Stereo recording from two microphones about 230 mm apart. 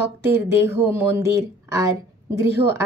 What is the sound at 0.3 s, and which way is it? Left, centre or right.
Speech, centre.